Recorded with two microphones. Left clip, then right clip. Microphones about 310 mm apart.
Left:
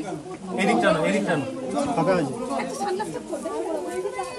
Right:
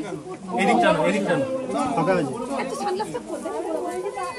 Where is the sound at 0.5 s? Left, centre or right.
Centre.